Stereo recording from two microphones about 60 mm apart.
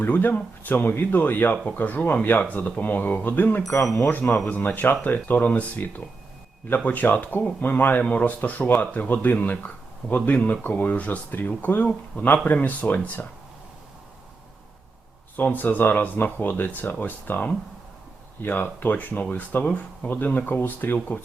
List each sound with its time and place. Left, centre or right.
0.0 s speech: left
15.4 s speech: left